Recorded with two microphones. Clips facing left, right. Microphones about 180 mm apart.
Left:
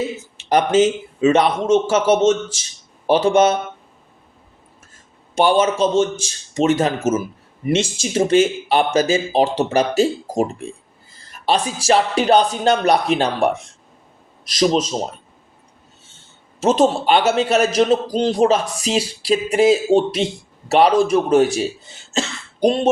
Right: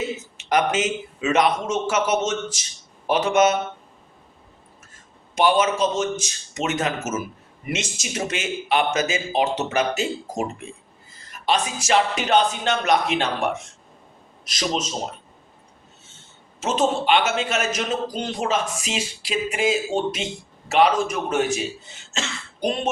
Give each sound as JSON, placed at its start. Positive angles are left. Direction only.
{"t": 0.3, "sound": "a man's voice", "side_deg": 30}
{"t": 5.3, "sound": "a man's voice", "side_deg": 30}
{"t": 16.6, "sound": "a man's voice", "side_deg": 35}